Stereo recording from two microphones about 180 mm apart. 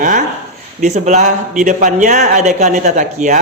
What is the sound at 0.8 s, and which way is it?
A man's voice, 40° right (ahead or behind).